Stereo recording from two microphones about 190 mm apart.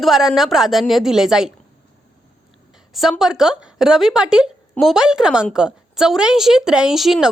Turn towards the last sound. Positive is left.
turn(degrees=0)  # may be behind; listen again after turning